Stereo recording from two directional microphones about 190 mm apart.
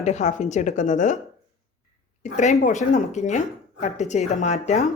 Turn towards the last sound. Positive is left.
turn(degrees=35)  # may be behind; listen again after turning